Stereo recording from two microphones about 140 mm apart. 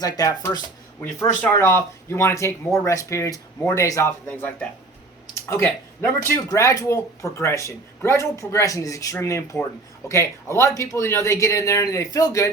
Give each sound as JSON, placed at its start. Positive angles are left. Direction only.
{"t": 0.0, "sound": "speech", "side_deg": 25}
{"t": 5.3, "sound": "a sound", "side_deg": 20}
{"t": 6.3, "sound": "speech", "side_deg": 25}